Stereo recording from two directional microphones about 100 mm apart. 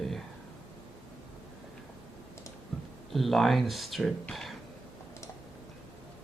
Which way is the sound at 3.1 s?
Centre (ahead or behind).